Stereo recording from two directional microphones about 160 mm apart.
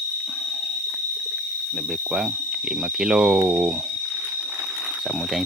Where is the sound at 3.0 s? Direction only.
5° right (ahead or behind).